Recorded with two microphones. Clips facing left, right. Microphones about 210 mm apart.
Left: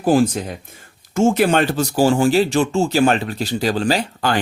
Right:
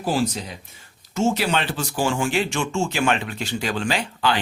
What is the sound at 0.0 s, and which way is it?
Speech, 50° left (ahead or behind).